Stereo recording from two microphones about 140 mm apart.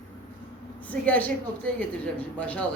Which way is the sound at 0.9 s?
10° left (ahead or behind).